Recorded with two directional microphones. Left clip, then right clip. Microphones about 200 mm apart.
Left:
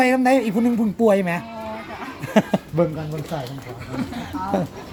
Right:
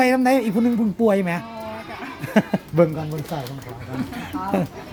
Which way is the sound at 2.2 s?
5° right (ahead or behind).